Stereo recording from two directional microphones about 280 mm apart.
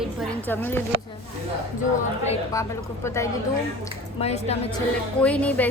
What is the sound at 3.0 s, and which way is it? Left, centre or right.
Speech, centre.